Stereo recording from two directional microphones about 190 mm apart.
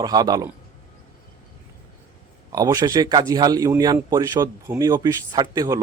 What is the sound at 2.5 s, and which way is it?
A man's voice, 20° right (ahead or behind).